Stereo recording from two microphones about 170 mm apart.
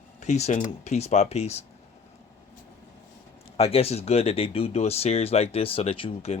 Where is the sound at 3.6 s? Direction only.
35° left (ahead or behind).